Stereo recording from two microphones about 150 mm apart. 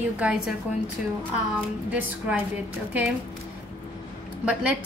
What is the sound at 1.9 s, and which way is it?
Speech, 10° right (ahead or behind).